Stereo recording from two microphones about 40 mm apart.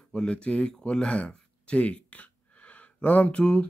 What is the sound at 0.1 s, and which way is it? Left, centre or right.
Speech, left.